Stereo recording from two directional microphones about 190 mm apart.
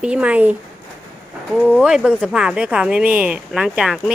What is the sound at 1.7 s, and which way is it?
Speech, 5° right (ahead or behind).